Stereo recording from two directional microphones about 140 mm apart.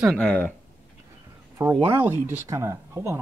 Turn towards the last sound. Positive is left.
turn(degrees=-20)  # may be behind; listen again after turning